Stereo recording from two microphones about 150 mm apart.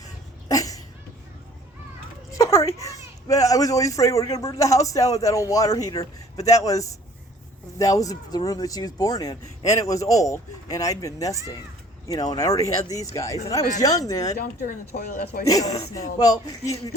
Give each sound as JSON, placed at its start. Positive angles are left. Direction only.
{"t": 0.0, "sound": "a sound", "side_deg": 25}
{"t": 2.4, "sound": "speech", "side_deg": 20}
{"t": 14.3, "sound": "speech", "side_deg": 90}
{"t": 16.1, "sound": "speech", "side_deg": 25}